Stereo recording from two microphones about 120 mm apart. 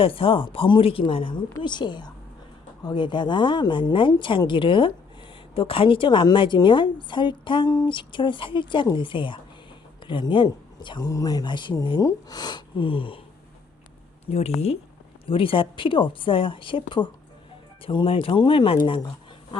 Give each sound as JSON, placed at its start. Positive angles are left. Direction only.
{"t": 0.0, "sound": "speech", "side_deg": 50}
{"t": 14.3, "sound": "speech", "side_deg": 60}
{"t": 15.3, "sound": "speech", "side_deg": 45}